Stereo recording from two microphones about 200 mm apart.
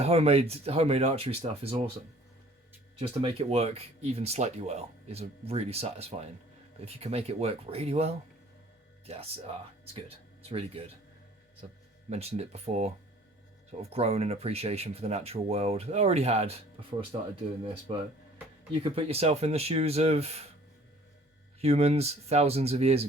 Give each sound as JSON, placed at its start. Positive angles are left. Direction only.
{"t": 0.0, "sound": "speech", "side_deg": -30}
{"t": 3.0, "sound": "speech", "side_deg": -30}
{"t": 12.1, "sound": "speech", "side_deg": -30}
{"t": 21.6, "sound": "speech", "side_deg": -30}